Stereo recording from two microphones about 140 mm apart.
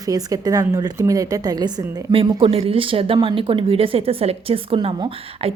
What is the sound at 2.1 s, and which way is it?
A woman's voice, 40° right (ahead or behind).